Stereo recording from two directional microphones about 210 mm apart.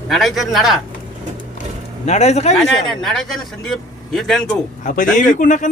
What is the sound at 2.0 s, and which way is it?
Speech, 30° left (ahead or behind).